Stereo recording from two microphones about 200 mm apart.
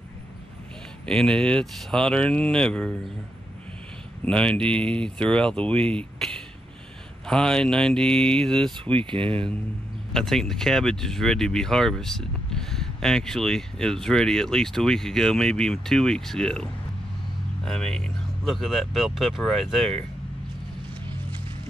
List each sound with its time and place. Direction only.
1.0 s speech: 5° left (ahead or behind)
4.2 s speech: 5° left (ahead or behind)
8.9 s speech: 25° right (ahead or behind)
10.1 s speech: centre (ahead or behind)
17.6 s speech: centre (ahead or behind)